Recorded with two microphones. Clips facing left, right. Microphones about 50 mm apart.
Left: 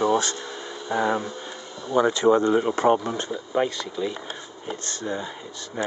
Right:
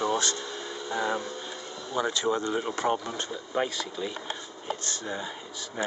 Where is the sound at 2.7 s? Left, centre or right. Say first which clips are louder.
Left 8 dB; left.